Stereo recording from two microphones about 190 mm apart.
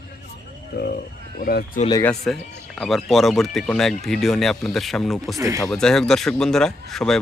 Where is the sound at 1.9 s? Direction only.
5° left (ahead or behind).